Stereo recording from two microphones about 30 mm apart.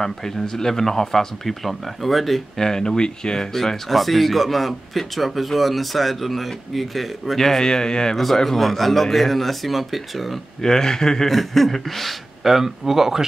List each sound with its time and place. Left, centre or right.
0.0 s speech: centre
3.0 s a man's voice: left
3.9 s speech: centre
7.4 s a man's voice: centre
8.5 s speech: centre
10.6 s a man's voice: centre
11.2 s speech: centre
12.4 s speech: centre